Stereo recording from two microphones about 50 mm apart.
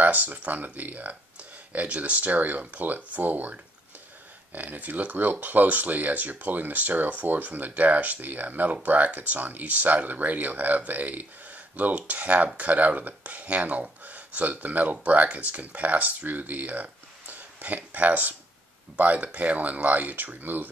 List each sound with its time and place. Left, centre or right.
0.0 s speech: right